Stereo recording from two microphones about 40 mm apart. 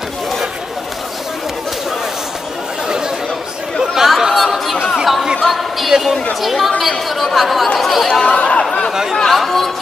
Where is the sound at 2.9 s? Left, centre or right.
Centre.